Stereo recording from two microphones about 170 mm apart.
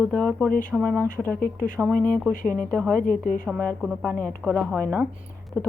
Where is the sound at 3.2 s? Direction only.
55° left (ahead or behind).